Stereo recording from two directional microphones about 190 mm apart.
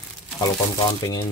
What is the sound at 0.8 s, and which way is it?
Speech, 20° left (ahead or behind).